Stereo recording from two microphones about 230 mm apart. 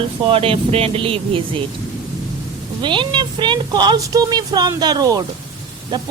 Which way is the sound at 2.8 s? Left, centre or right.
Right.